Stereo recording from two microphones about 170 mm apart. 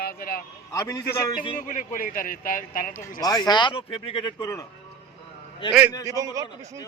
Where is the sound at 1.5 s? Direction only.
50° left (ahead or behind).